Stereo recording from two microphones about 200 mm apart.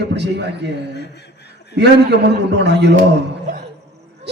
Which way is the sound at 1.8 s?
60° right (ahead or behind).